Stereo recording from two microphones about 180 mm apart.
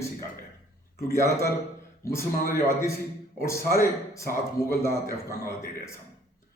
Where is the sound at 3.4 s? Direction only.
15° left (ahead or behind).